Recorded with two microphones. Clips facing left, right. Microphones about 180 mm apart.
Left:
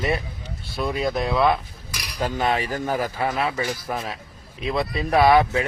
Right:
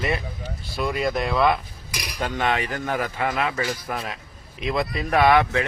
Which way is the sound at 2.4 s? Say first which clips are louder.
Even; 35° left (ahead or behind).